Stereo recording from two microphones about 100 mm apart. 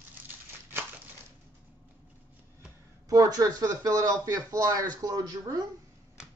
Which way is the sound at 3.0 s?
40° right (ahead or behind).